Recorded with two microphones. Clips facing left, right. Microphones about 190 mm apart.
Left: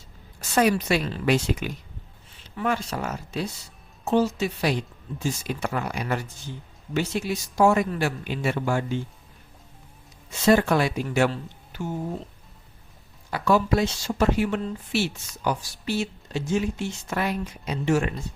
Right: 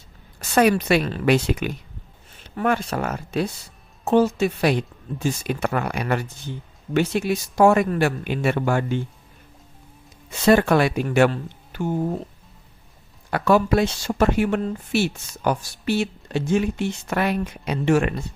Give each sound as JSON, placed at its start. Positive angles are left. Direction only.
{"t": 0.5, "sound": "speech", "side_deg": -60}
{"t": 10.3, "sound": "speech", "side_deg": -60}
{"t": 13.3, "sound": "speech", "side_deg": -60}